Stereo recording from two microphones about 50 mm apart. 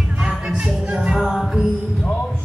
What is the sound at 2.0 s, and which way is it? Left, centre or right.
Music, left.